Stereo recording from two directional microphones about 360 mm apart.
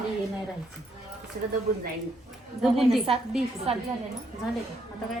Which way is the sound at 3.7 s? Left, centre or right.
Centre.